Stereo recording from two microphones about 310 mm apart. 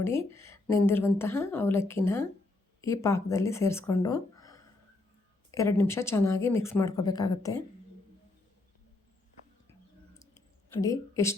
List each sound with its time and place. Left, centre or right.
0.0 s a woman's voice: centre
11.1 s speech: centre